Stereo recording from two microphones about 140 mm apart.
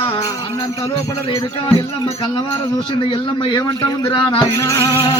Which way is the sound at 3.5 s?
35° left (ahead or behind).